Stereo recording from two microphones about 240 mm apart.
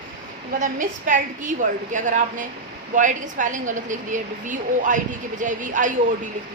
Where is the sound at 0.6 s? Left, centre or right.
Right.